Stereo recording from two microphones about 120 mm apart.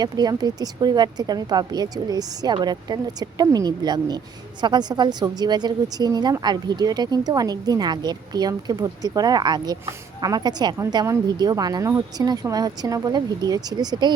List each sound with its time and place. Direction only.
0.0 s a woman's voice: 35° right (ahead or behind)
11.0 s a woman's voice: 25° right (ahead or behind)
11.3 s a woman's voice: 35° right (ahead or behind)